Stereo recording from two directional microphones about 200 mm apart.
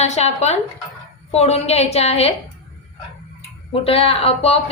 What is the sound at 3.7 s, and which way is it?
Speech, 30° left (ahead or behind).